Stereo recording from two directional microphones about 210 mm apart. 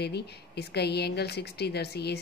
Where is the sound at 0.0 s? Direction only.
50° left (ahead or behind).